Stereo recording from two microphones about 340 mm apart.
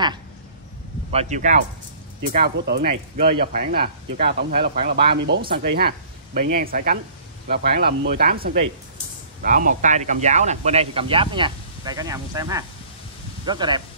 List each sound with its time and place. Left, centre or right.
1.1 s speech: right